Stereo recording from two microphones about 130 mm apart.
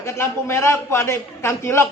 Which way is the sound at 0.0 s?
20° left (ahead or behind).